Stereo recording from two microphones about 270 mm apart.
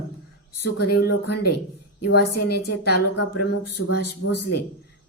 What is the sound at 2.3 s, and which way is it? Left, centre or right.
Speech, left.